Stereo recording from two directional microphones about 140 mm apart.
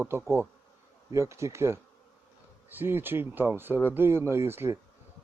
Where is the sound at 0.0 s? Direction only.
15° right (ahead or behind).